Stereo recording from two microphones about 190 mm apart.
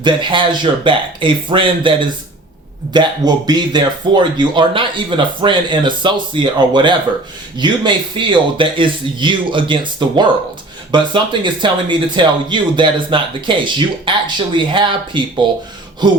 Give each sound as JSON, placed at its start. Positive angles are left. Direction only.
{"t": 0.0, "sound": "speech", "side_deg": -25}